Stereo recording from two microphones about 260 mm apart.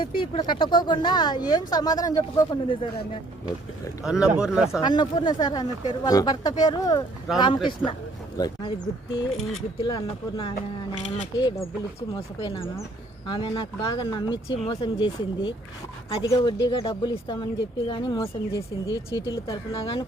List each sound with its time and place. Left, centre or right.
0.0 s speech: centre
4.0 s speech: centre
4.8 s speech: centre